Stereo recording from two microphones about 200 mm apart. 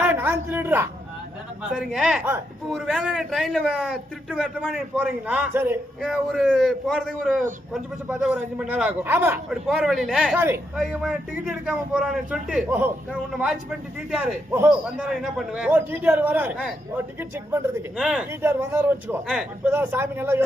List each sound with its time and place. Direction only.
0.0 s a sound: 10° right (ahead or behind)
1.7 s a man's voice: centre (ahead or behind)
10.3 s a man's voice: 10° right (ahead or behind)
10.8 s a man's voice: centre (ahead or behind)